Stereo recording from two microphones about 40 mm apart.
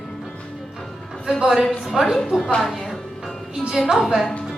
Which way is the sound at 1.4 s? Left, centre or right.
Centre.